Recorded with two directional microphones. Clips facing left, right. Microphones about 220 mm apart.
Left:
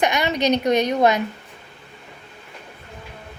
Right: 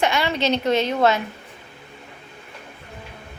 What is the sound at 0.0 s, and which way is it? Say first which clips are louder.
A woman's voice: left 1 dB; 15° left (ahead or behind).